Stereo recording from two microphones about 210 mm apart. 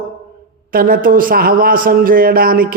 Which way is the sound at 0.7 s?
45° right (ahead or behind).